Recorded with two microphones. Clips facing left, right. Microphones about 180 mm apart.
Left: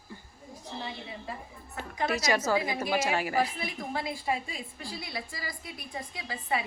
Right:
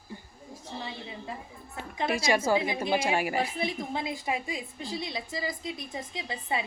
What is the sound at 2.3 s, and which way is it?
Speech, 10° right (ahead or behind).